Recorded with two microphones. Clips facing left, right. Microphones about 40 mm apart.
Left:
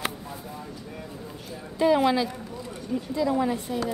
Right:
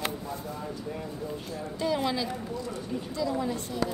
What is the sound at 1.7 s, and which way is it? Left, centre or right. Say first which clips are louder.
A woman's voice: left 8 dB; left.